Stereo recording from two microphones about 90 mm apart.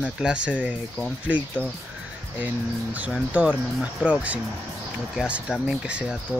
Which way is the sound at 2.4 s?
20° right (ahead or behind).